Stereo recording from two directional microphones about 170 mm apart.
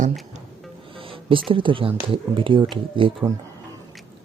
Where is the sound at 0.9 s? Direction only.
30° right (ahead or behind).